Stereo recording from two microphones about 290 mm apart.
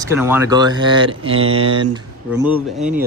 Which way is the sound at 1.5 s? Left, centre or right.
Centre.